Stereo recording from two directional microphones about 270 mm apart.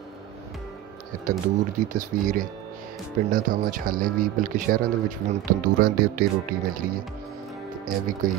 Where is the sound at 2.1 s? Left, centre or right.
Right.